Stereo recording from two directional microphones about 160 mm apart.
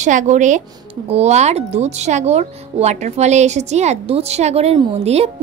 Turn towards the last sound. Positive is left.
turn(degrees=-40)  # may be behind; listen again after turning